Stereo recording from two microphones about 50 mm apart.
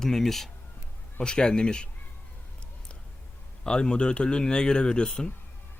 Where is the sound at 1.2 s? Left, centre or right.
Centre.